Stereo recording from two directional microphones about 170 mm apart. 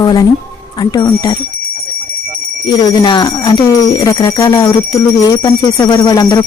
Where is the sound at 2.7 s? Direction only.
25° left (ahead or behind).